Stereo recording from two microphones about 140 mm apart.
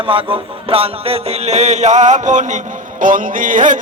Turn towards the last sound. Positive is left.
turn(degrees=-70)  # may be behind; listen again after turning